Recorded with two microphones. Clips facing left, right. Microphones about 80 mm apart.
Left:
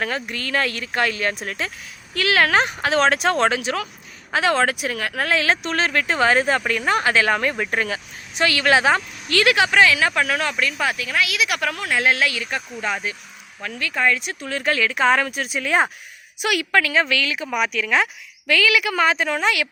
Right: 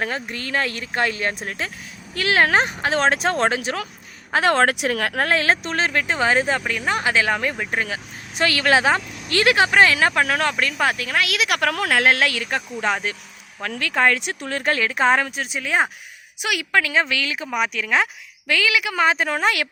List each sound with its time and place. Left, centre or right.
0.0 s speech: right
4.3 s speech: right
5.1 s speech: right; by 8.0 s centre
8.4 s speech: right
14.4 s speech: right
15.3 s speech: right
15.6 s speech: centre
19.1 s speech: right